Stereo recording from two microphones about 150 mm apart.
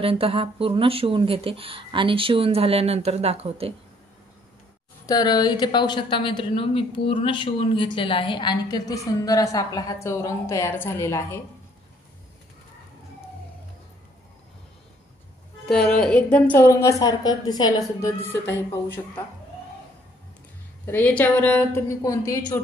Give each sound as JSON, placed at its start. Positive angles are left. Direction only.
{"t": 0.0, "sound": "speech", "side_deg": -40}
{"t": 5.0, "sound": "a woman's voice", "side_deg": 25}
{"t": 15.9, "sound": "a woman's voice", "side_deg": 10}
{"t": 18.2, "sound": "a woman's voice", "side_deg": 10}
{"t": 20.8, "sound": "a woman's voice", "side_deg": 10}